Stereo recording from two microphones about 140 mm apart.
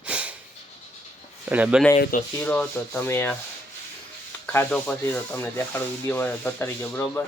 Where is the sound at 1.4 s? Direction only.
10° right (ahead or behind).